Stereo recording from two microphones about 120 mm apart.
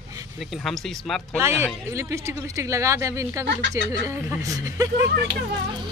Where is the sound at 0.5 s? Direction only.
5° left (ahead or behind).